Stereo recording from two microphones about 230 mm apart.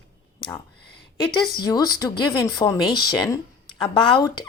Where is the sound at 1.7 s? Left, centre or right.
Centre.